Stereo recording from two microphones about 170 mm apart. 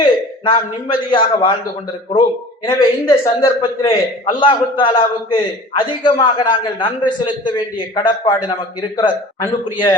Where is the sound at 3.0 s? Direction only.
20° left (ahead or behind).